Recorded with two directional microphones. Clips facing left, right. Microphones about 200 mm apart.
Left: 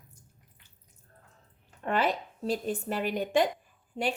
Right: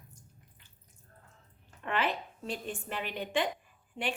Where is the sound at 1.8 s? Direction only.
40° left (ahead or behind).